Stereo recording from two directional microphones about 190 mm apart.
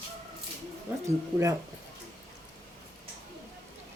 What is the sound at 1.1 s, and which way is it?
Speech, 15° right (ahead or behind).